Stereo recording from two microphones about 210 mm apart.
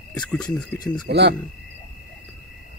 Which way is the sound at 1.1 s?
50° right (ahead or behind).